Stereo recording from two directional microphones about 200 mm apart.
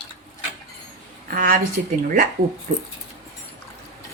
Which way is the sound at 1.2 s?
45° right (ahead or behind).